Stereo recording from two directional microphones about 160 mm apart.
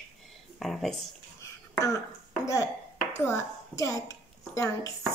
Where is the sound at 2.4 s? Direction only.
20° left (ahead or behind).